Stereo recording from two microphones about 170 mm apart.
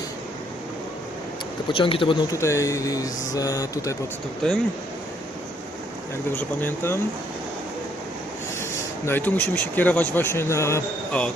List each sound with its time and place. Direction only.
1.7 s speech: 30° left (ahead or behind)
2.4 s speech: 15° left (ahead or behind)
4.4 s speech: 5° left (ahead or behind)
6.2 s speech: 10° left (ahead or behind)
9.0 s speech: 10° left (ahead or behind)